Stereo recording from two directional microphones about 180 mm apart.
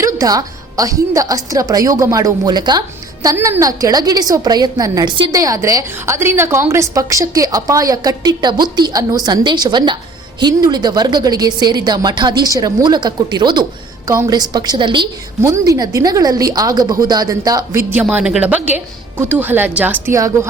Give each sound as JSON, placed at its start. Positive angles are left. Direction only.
{"t": 0.0, "sound": "a woman's voice", "side_deg": -20}
{"t": 15.4, "sound": "a woman's voice", "side_deg": -15}
{"t": 18.0, "sound": "a woman's voice", "side_deg": -5}